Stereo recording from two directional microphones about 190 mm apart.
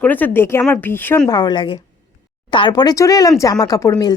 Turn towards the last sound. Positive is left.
turn(degrees=20)  # may be behind; listen again after turning